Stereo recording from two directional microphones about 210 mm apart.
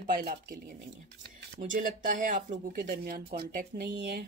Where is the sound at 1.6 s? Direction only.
40° right (ahead or behind).